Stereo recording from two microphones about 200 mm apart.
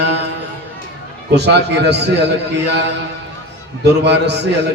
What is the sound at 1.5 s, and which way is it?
Speech, 55° right (ahead or behind).